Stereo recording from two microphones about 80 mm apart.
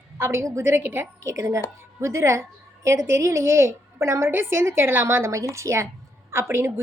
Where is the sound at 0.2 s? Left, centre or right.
Right.